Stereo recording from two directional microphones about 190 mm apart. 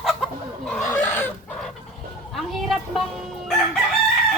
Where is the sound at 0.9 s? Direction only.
10° left (ahead or behind).